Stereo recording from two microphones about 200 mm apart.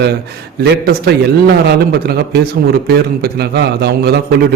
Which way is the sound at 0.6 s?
55° right (ahead or behind).